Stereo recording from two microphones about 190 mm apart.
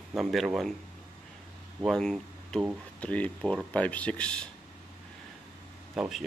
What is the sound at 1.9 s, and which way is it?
Speech, 5° left (ahead or behind).